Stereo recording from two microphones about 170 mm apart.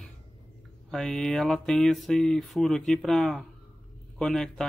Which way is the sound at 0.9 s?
5° left (ahead or behind).